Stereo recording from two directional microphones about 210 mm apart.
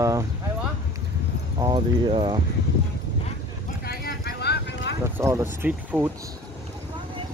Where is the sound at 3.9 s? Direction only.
45° left (ahead or behind).